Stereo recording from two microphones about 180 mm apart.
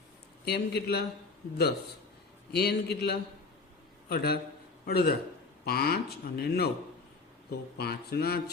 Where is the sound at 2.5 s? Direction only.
65° left (ahead or behind).